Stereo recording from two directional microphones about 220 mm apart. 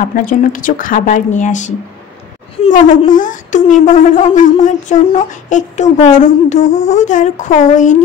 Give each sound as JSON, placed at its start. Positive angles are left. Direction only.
{"t": 0.1, "sound": "speech", "side_deg": 40}